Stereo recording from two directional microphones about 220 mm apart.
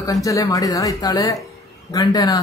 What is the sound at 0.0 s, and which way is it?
Speech, 15° left (ahead or behind).